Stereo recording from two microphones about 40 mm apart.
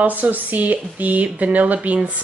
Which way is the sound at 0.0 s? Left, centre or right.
Right.